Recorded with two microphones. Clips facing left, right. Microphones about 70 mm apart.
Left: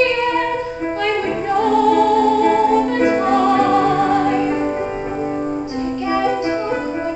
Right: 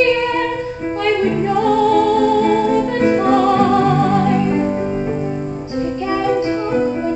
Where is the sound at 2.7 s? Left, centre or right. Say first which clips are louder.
Even; left.